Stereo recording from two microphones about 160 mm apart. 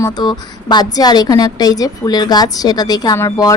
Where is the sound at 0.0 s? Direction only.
25° left (ahead or behind).